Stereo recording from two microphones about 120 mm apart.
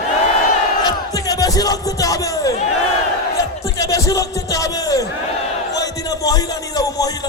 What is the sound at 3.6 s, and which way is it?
A man's voice, 30° left (ahead or behind).